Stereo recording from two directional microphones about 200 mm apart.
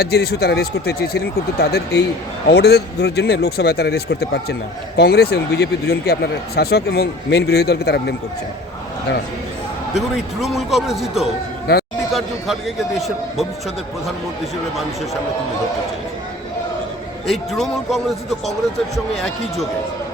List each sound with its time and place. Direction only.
0.0 s speech: 55° left (ahead or behind)
10.4 s a man's voice: centre (ahead or behind)
17.2 s a man's voice: centre (ahead or behind)